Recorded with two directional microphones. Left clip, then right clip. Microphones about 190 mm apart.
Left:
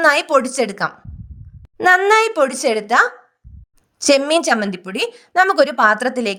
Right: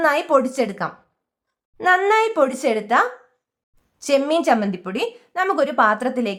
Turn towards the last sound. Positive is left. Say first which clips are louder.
# left 4 dB
turn(degrees=40)  # may be behind; listen again after turning